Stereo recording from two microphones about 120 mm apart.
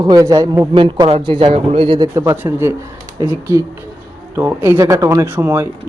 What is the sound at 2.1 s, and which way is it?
Speech, 25° right (ahead or behind).